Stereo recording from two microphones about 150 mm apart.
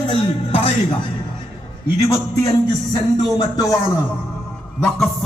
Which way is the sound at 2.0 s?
25° left (ahead or behind).